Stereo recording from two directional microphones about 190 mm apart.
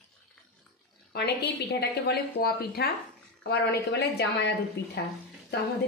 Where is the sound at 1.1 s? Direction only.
60° left (ahead or behind).